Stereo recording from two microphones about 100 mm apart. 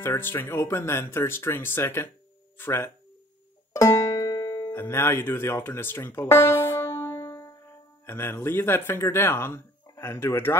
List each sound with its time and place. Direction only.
0.0 s speech: 25° left (ahead or behind)
3.7 s music: 35° left (ahead or behind)
4.7 s speech: 25° left (ahead or behind)